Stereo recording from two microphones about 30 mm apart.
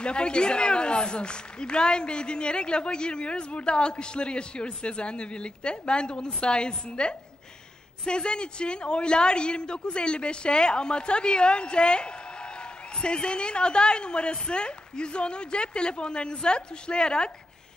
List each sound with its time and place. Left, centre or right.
0.0 s a man's voice: left